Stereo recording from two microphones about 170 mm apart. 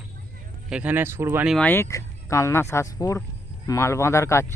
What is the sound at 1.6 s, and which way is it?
Speech, 15° left (ahead or behind).